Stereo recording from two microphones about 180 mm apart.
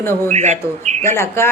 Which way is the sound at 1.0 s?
15° left (ahead or behind).